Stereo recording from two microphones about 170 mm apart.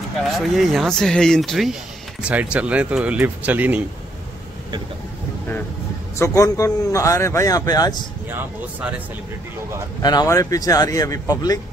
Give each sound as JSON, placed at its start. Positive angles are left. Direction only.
{"t": 0.4, "sound": "speech", "side_deg": 0}
{"t": 6.1, "sound": "speech", "side_deg": 15}
{"t": 8.3, "sound": "speech", "side_deg": -10}
{"t": 10.0, "sound": "speech", "side_deg": 20}